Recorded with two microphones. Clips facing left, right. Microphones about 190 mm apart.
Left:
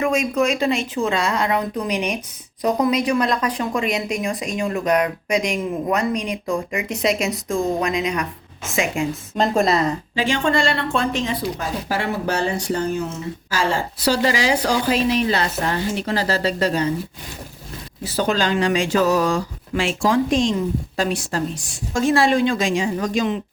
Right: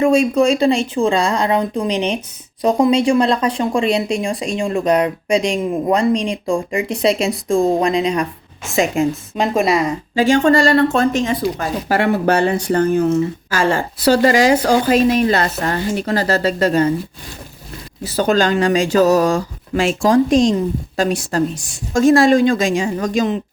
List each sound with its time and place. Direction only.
0.0 s speech: 30° right (ahead or behind)
9.4 s a woman's voice: 10° right (ahead or behind)
10.2 s speech: 45° right (ahead or behind)
18.0 s speech: 45° right (ahead or behind)